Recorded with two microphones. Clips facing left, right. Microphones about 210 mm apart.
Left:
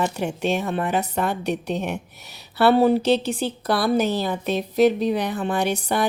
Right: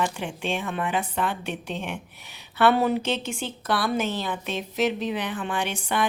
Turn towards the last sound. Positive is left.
turn(degrees=40)  # may be behind; listen again after turning